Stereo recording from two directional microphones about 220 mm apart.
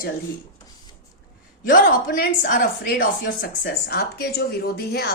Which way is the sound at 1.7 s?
40° left (ahead or behind).